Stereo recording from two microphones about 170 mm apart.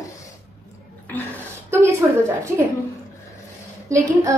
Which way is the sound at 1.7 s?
15° right (ahead or behind).